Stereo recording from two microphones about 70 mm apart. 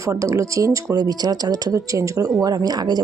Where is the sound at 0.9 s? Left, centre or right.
Right.